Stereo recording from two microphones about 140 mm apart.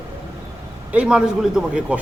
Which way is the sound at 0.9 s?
10° right (ahead or behind).